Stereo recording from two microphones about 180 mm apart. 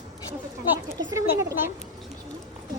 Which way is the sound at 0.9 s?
20° right (ahead or behind).